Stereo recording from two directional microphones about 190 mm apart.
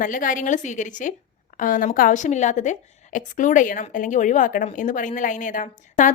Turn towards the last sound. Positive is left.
turn(degrees=40)  # may be behind; listen again after turning